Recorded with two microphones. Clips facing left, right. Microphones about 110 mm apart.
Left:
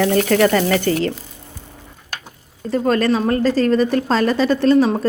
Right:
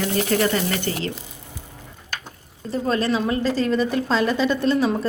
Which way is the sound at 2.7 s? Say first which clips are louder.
Left 5 dB; 50° left (ahead or behind).